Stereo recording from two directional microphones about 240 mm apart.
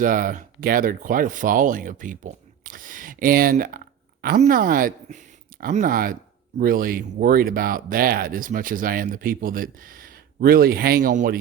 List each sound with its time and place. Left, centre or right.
0.0 s speech: right